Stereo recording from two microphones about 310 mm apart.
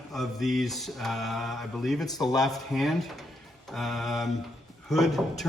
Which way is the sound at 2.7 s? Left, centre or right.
Centre.